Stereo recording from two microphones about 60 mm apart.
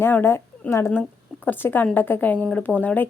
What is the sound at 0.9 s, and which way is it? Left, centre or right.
A woman's voice, left.